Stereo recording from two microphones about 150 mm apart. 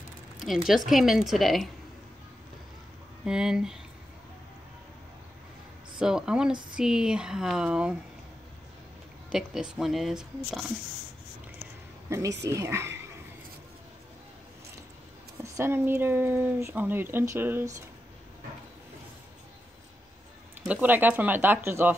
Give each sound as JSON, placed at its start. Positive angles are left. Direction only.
{"t": 0.4, "sound": "speech", "side_deg": 0}
{"t": 3.3, "sound": "speech", "side_deg": -5}
{"t": 5.9, "sound": "speech", "side_deg": -5}
{"t": 9.3, "sound": "speech", "side_deg": -5}
{"t": 12.1, "sound": "speech", "side_deg": -20}
{"t": 15.4, "sound": "speech", "side_deg": -15}
{"t": 20.6, "sound": "speech", "side_deg": -10}